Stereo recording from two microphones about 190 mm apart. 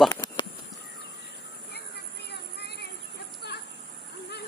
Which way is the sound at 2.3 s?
60° left (ahead or behind).